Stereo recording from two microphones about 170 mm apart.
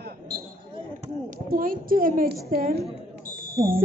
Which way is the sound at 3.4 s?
60° right (ahead or behind).